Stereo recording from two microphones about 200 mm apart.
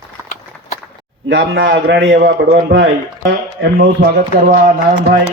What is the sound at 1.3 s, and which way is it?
Speech, 75° right (ahead or behind).